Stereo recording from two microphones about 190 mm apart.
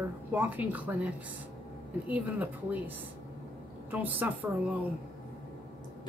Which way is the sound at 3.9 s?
10° right (ahead or behind).